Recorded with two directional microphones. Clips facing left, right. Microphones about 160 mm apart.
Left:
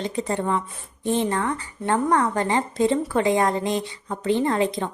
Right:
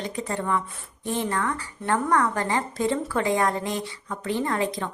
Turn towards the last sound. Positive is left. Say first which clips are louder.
# left 4 dB
turn(degrees=25)  # may be behind; listen again after turning